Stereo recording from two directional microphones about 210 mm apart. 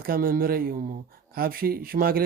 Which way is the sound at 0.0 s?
45° right (ahead or behind).